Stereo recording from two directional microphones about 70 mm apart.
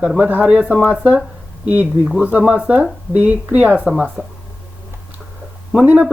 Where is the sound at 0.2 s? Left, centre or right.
Right.